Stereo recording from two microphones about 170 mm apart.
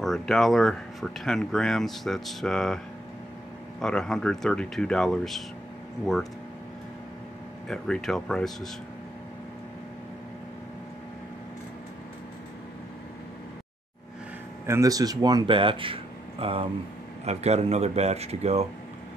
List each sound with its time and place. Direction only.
0.0 s speech: centre (ahead or behind)
3.8 s speech: centre (ahead or behind)
7.6 s speech: 5° left (ahead or behind)
14.7 s speech: 20° right (ahead or behind); by 18.7 s 40° right (ahead or behind)